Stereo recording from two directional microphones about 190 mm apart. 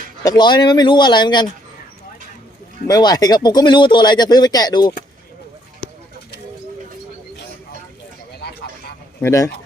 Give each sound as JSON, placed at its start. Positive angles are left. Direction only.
{"t": 0.2, "sound": "speech", "side_deg": 20}
{"t": 2.8, "sound": "speech", "side_deg": 20}
{"t": 9.2, "sound": "speech", "side_deg": 15}